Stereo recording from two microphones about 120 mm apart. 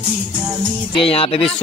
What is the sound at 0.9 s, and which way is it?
Speech, 50° left (ahead or behind).